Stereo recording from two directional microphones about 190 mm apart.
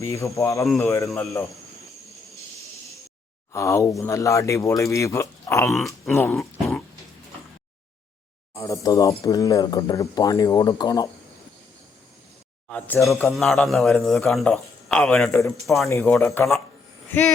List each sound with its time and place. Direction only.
0.0 s speech: 15° left (ahead or behind)
3.5 s speech: 15° left (ahead or behind)
5.7 s a man's voice: centre (ahead or behind)
6.1 s speech: 15° left (ahead or behind)
8.5 s speech: 15° left (ahead or behind)
12.6 s a man's voice: 5° left (ahead or behind)
15.9 s speech: 15° left (ahead or behind)